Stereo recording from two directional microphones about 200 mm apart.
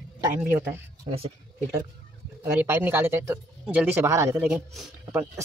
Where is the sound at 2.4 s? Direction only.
10° right (ahead or behind).